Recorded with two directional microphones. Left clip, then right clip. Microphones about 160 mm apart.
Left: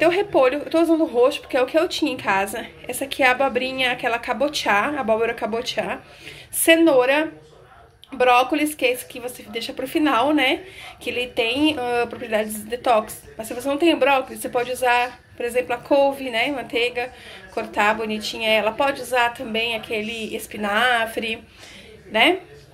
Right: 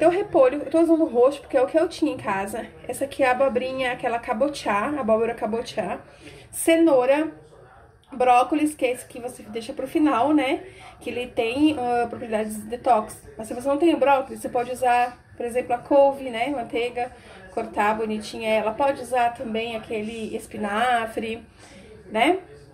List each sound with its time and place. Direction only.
0.0 s a woman's voice: 5° right (ahead or behind)